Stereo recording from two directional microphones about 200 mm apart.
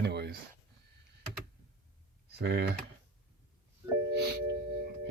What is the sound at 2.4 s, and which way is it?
Speech, 55° right (ahead or behind).